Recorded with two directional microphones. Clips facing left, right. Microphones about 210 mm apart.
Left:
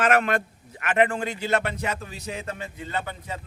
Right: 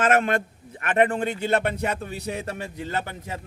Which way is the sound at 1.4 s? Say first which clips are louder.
Right 1 dB; 55° right (ahead or behind).